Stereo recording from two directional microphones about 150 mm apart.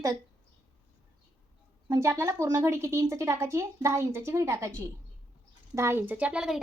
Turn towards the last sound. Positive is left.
turn(degrees=-5)  # may be behind; listen again after turning